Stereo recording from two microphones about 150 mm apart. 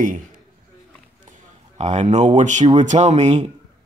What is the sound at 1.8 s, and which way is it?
Speech, 50° right (ahead or behind).